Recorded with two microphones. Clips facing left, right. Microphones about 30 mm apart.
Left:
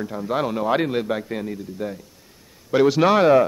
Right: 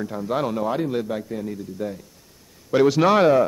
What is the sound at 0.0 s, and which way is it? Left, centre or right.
Speech, centre.